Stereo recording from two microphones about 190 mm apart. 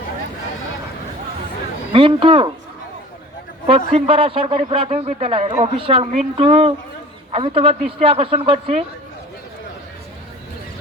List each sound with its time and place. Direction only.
1.9 s speech: 30° right (ahead or behind)
3.9 s speech: 30° right (ahead or behind)